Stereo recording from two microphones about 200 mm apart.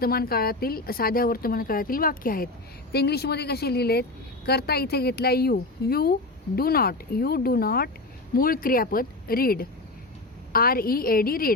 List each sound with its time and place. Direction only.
0.0 s speech: 50° left (ahead or behind)